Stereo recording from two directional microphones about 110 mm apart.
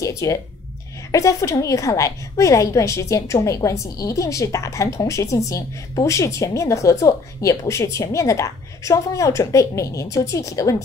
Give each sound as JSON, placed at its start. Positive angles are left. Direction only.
{"t": 0.0, "sound": "a woman's voice", "side_deg": 30}